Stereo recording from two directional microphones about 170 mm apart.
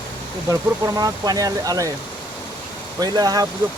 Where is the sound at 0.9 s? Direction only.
20° right (ahead or behind).